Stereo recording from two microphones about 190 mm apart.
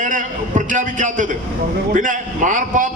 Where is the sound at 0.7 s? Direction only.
40° right (ahead or behind).